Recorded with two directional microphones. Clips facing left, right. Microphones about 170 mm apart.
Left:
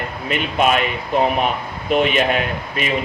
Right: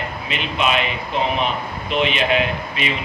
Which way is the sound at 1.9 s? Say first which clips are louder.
Left 3 dB; 45° left (ahead or behind).